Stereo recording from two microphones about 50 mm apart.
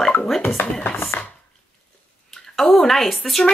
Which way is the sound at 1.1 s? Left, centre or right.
Left.